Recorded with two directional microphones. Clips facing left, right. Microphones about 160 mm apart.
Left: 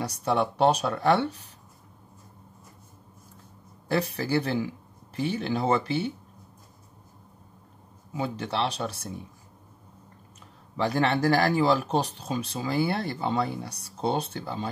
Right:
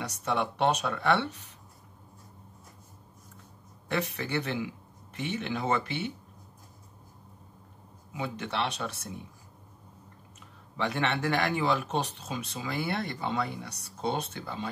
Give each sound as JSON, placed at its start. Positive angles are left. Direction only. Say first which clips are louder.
{"t": 0.0, "sound": "speech", "louder": "left 5 dB", "side_deg": 35}
{"t": 3.9, "sound": "speech", "louder": "left 5 dB", "side_deg": 35}
{"t": 8.1, "sound": "speech", "louder": "left 4 dB", "side_deg": 30}
{"t": 10.8, "sound": "speech", "louder": "left 5 dB", "side_deg": 35}